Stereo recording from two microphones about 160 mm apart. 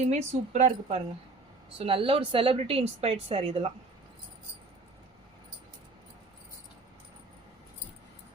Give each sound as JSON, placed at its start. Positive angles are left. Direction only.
{"t": 0.1, "sound": "speech", "side_deg": -45}
{"t": 1.8, "sound": "speech", "side_deg": -35}